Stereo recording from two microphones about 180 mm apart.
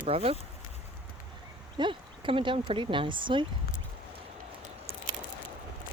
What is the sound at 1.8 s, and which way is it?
Speech, 30° right (ahead or behind).